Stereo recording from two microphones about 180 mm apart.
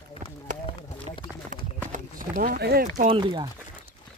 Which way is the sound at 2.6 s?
60° right (ahead or behind).